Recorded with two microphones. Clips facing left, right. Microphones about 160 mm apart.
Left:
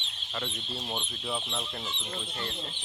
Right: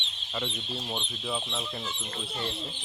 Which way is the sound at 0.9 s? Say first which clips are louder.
Right 1 dB; centre (ahead or behind).